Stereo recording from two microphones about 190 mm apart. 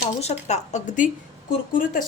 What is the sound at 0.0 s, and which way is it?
Speech, 35° left (ahead or behind).